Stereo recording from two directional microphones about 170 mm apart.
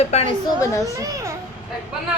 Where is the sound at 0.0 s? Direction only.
40° left (ahead or behind).